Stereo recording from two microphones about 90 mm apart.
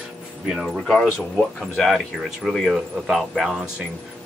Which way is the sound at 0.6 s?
10° left (ahead or behind).